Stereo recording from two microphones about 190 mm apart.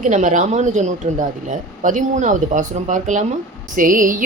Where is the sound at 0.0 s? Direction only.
40° right (ahead or behind).